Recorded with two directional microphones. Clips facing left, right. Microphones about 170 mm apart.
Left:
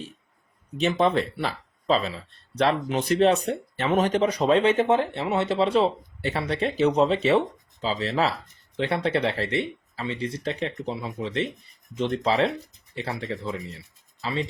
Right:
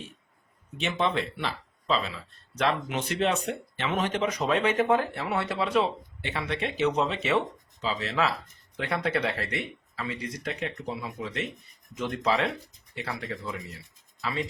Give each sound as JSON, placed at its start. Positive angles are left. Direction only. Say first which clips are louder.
{"t": 0.8, "sound": "speech", "louder": "left 6 dB", "side_deg": 40}